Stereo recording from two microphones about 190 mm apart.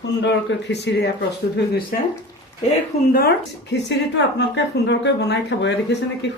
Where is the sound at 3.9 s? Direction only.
70° left (ahead or behind).